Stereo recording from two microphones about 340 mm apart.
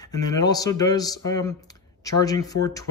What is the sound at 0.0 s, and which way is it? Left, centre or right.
Speech, centre.